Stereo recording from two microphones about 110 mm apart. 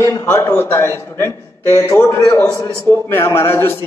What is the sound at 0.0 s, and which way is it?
A man's voice, 20° left (ahead or behind).